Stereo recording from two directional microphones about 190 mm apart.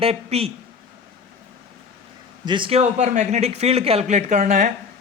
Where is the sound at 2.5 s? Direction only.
25° right (ahead or behind).